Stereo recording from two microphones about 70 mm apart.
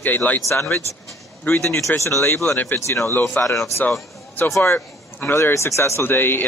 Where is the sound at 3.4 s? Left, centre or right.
Left.